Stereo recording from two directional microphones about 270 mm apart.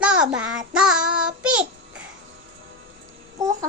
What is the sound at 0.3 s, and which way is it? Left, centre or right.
Child singing, centre.